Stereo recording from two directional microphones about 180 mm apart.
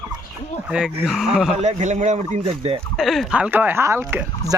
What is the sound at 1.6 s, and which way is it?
Speech, 40° right (ahead or behind).